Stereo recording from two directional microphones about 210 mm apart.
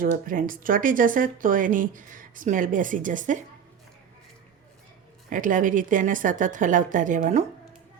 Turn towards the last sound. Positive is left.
turn(degrees=-35)  # may be behind; listen again after turning